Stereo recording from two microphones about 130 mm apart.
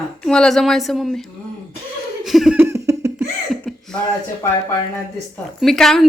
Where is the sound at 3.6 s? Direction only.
Centre (ahead or behind).